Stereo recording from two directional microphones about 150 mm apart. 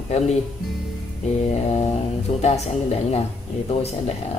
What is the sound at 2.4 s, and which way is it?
Speech, 50° left (ahead or behind).